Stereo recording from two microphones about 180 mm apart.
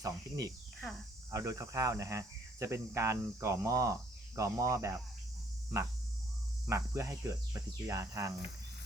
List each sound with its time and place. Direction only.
0.0 s speech: 20° right (ahead or behind)
0.8 s speech: centre (ahead or behind)
1.3 s speech: 20° right (ahead or behind)
6.7 s speech: 15° right (ahead or behind)